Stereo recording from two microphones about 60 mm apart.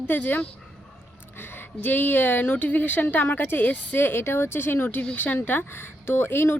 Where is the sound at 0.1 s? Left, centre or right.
Left.